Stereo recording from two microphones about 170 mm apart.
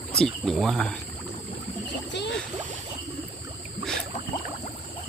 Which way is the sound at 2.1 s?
90° left.